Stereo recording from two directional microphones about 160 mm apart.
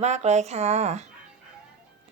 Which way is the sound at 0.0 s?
45° right (ahead or behind).